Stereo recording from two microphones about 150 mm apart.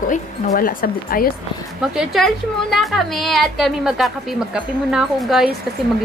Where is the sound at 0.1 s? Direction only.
65° left (ahead or behind).